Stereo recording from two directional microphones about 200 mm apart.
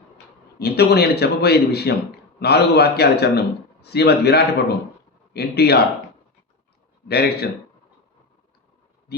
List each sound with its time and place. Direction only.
0.6 s a man's voice: 55° left (ahead or behind)
7.1 s a man's voice: 55° left (ahead or behind)